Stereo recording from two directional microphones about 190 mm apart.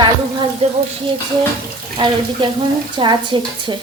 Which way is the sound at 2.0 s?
25° right (ahead or behind).